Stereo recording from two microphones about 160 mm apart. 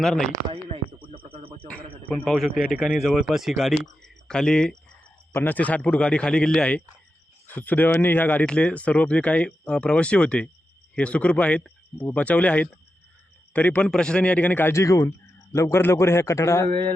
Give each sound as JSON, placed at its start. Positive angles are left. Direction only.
{"t": 0.0, "sound": "speech", "side_deg": 5}
{"t": 0.5, "sound": "frog", "side_deg": -35}
{"t": 2.0, "sound": "speech", "side_deg": 10}
{"t": 2.7, "sound": "speech", "side_deg": -5}
{"t": 4.0, "sound": "cricket", "side_deg": 5}
{"t": 5.3, "sound": "speech", "side_deg": 10}